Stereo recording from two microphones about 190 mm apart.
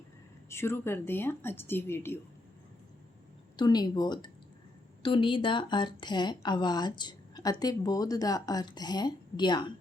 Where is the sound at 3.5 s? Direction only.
20° left (ahead or behind).